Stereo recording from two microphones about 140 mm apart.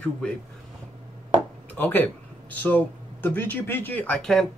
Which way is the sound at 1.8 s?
15° left (ahead or behind).